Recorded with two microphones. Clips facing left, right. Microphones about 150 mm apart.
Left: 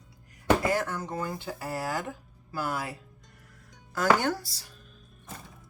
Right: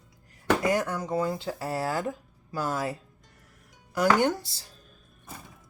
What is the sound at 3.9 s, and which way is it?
Speech, 15° right (ahead or behind).